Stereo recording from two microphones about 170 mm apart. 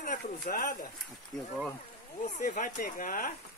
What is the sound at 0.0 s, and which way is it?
Speech, 55° left (ahead or behind).